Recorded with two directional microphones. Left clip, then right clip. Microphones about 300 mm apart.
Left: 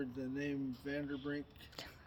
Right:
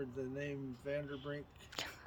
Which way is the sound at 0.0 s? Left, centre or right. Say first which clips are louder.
Left 1 dB; centre.